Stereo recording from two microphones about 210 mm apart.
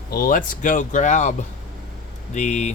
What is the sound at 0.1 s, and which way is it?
Speech, 45° left (ahead or behind).